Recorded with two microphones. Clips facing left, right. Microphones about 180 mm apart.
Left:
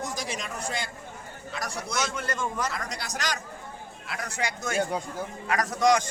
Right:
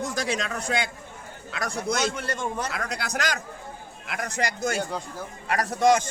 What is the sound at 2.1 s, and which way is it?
Speech, 30° right (ahead or behind).